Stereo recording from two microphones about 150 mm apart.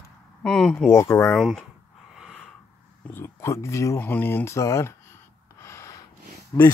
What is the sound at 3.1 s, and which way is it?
Speech, 20° left (ahead or behind).